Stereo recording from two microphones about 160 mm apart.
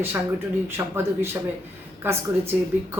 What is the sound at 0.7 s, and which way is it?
Speech, 15° right (ahead or behind).